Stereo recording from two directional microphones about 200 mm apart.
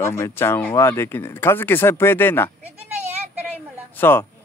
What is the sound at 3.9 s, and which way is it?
Speech, 10° left (ahead or behind).